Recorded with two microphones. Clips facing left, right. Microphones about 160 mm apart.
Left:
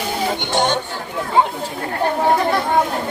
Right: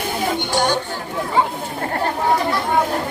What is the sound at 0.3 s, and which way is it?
Music, 20° left (ahead or behind).